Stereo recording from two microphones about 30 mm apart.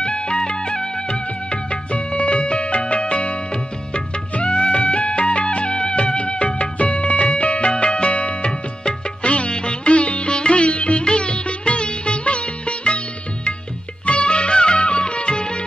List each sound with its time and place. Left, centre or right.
0.0 s music: left
9.2 s sitar: left
14.0 s music: left